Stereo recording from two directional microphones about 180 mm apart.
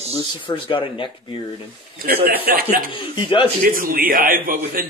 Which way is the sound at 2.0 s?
55° right (ahead or behind).